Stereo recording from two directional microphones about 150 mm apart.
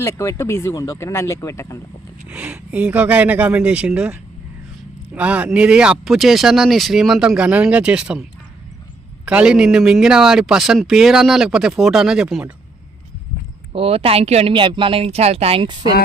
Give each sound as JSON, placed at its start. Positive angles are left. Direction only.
{"t": 0.0, "sound": "speech", "side_deg": 20}
{"t": 2.2, "sound": "a man's voice", "side_deg": -5}
{"t": 9.2, "sound": "a man's voice", "side_deg": -5}
{"t": 13.7, "sound": "speech", "side_deg": -40}